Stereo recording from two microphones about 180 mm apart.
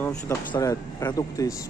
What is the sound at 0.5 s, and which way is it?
Speech, 20° left (ahead or behind).